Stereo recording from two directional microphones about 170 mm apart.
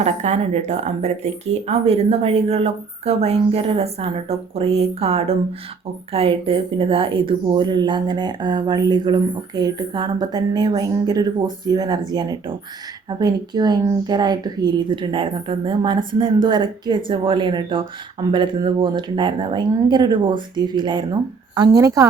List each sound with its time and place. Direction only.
0.0 s speech: 40° right (ahead or behind); by 22.0 s 20° right (ahead or behind)